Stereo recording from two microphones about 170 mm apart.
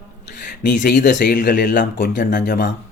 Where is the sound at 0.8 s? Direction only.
50° left (ahead or behind).